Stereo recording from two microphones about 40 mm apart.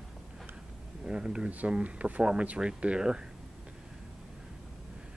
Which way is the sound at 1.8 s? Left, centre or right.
Right.